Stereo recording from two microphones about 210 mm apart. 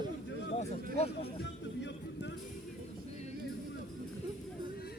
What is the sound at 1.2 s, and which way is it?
Music, 55° left (ahead or behind).